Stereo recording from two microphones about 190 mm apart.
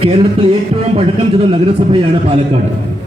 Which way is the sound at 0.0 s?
30° right (ahead or behind).